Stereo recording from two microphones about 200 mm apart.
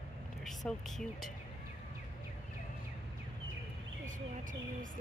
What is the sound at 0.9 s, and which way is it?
Speech, centre (ahead or behind).